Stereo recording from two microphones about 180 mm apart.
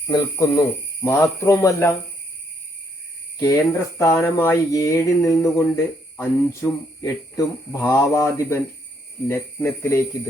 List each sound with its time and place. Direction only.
0.1 s speech: 20° left (ahead or behind)
3.4 s speech: 15° left (ahead or behind)